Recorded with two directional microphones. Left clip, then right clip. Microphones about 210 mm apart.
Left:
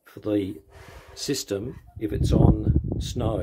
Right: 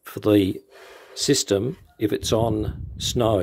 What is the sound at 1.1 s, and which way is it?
Speech, 25° right (ahead or behind).